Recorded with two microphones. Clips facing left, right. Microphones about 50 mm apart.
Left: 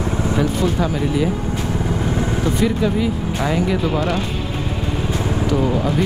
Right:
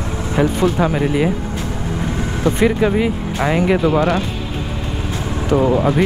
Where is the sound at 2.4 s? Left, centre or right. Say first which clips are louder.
Right 6 dB; right.